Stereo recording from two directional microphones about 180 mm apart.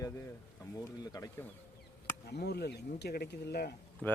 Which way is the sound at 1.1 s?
20° left (ahead or behind).